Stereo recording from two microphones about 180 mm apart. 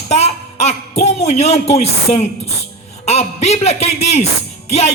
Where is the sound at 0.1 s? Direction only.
40° left (ahead or behind).